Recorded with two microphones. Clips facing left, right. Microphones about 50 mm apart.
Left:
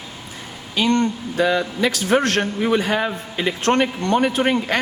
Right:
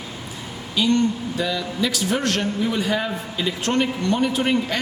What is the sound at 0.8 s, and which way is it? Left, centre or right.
A man's voice, left.